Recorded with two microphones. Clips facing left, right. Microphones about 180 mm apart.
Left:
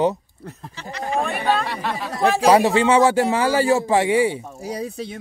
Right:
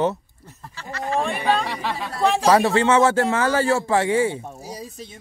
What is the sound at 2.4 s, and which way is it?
Speech, 15° left (ahead or behind).